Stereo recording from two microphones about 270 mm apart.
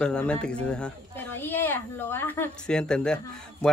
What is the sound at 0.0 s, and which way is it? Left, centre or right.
A woman's voice, centre.